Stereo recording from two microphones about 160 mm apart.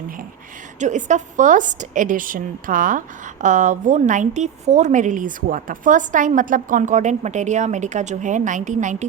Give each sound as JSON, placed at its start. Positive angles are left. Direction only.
{"t": 0.8, "sound": "a woman's voice", "side_deg": -50}